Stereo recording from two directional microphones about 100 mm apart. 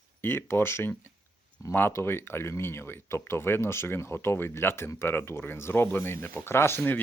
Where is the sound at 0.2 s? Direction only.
20° left (ahead or behind).